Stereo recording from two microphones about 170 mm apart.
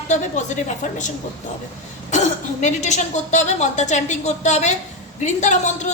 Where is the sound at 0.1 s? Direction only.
45° left (ahead or behind).